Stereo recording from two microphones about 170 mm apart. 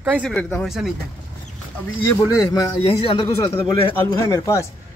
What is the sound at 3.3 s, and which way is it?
Speech, 15° left (ahead or behind).